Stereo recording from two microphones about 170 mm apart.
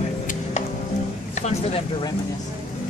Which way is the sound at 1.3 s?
40° left (ahead or behind).